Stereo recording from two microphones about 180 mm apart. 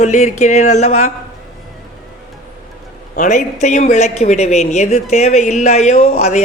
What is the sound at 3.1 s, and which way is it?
Speech, 40° left (ahead or behind).